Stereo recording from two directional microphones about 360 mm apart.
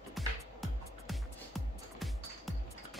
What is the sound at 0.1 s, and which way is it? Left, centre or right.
Music, centre.